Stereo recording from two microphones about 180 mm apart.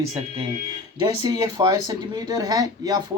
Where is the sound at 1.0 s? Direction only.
20° right (ahead or behind).